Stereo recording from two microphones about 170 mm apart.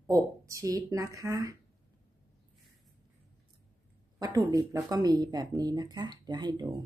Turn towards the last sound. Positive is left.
turn(degrees=-25)  # may be behind; listen again after turning